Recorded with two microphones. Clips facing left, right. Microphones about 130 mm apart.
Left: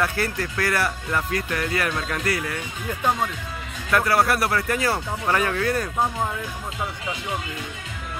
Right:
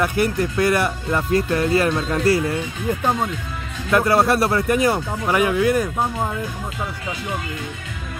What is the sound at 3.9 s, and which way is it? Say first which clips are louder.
Speech: right 4 dB; 20° right (ahead or behind).